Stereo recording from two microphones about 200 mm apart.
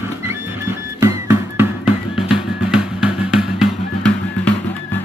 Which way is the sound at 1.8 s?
5° right (ahead or behind).